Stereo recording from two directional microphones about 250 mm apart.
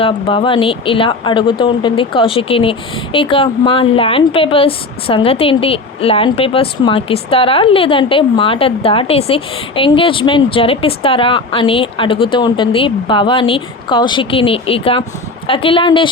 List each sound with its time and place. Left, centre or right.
0.0 s speech: left